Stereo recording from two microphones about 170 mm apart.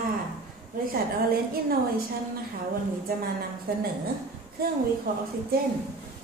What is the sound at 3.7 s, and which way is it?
Speech, 65° right (ahead or behind).